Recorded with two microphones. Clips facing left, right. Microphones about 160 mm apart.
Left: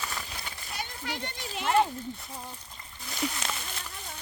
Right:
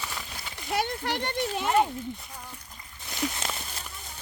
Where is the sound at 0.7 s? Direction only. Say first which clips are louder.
Right 9 dB; 65° right (ahead or behind).